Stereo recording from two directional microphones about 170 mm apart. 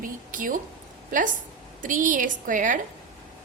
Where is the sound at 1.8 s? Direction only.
50° right (ahead or behind).